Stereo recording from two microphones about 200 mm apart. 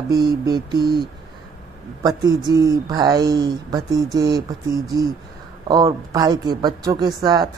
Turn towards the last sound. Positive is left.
turn(degrees=-20)  # may be behind; listen again after turning